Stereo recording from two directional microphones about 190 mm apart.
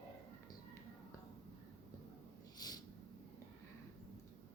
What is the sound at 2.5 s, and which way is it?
Snort, 20° left (ahead or behind).